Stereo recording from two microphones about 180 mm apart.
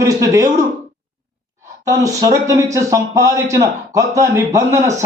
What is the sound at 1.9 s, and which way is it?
A man's voice, 20° right (ahead or behind).